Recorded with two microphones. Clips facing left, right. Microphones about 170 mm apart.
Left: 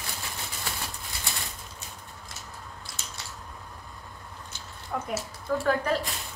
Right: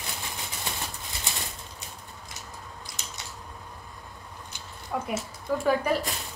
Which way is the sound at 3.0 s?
20° right (ahead or behind).